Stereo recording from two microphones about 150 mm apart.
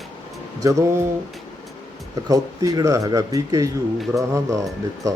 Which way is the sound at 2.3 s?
25° right (ahead or behind).